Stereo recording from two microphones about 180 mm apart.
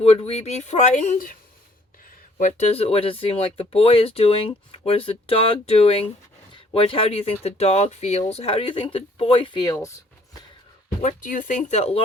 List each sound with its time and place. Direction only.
0.0 s speech: 35° left (ahead or behind)
2.4 s speech: 35° left (ahead or behind); by 9.9 s 20° left (ahead or behind)
11.0 s speech: 45° left (ahead or behind)